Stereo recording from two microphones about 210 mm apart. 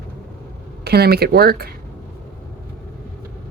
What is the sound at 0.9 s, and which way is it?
Speech, 50° right (ahead or behind).